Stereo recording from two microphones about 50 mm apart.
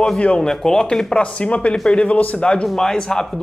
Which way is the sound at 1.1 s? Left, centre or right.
Left.